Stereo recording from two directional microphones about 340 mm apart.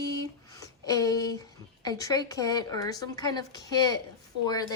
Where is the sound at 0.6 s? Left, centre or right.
Centre.